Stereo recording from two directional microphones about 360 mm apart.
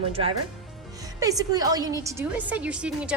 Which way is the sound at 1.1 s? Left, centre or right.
Centre.